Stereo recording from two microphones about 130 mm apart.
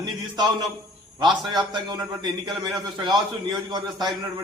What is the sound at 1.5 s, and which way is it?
A man's voice, 35° right (ahead or behind).